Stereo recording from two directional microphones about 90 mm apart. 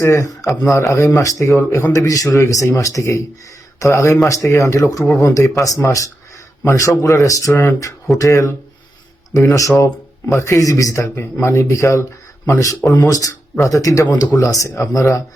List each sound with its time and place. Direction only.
0.0 s a man's voice: 35° left (ahead or behind)